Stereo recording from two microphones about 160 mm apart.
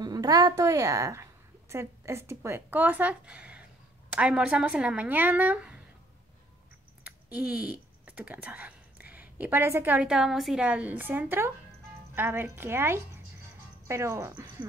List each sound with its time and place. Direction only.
0.0 s a woman's voice: 25° right (ahead or behind); by 5.8 s 10° right (ahead or behind)
7.0 s a sound: 10° right (ahead or behind)
9.1 s a woman's voice: 10° right (ahead or behind)